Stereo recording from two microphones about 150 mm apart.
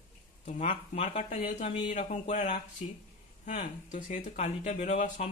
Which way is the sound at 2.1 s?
50° left (ahead or behind).